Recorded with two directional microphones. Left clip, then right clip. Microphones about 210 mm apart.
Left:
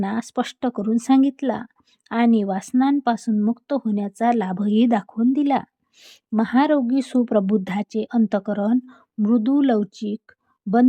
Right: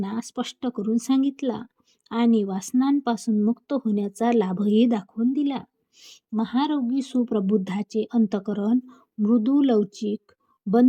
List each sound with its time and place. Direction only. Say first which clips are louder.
0.0 s speech: left 6 dB; 15° left (ahead or behind)